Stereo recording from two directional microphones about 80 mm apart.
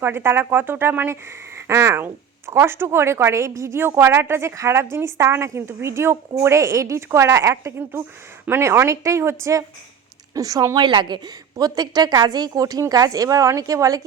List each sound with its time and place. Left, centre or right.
0.0 s a woman's voice: right
10.8 s a woman's voice: right
11.5 s speech: right